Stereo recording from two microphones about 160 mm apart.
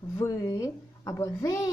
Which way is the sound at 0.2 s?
20° left (ahead or behind).